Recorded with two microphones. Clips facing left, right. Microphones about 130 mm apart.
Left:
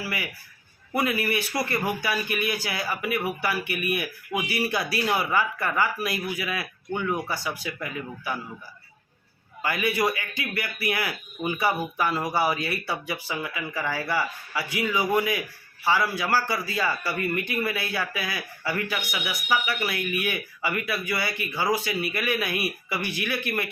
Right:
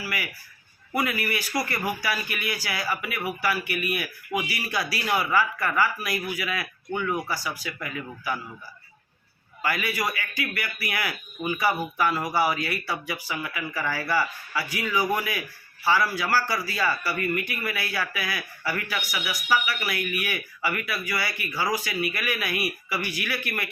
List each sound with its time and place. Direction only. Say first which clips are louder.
0.9 s speech: left 2 dB; 25° left (ahead or behind)
9.6 s speech: left 3 dB; 25° left (ahead or behind)